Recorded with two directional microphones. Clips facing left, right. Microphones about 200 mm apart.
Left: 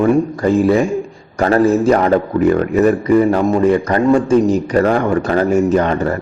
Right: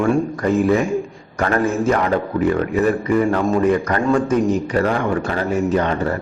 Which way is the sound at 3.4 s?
25° left (ahead or behind).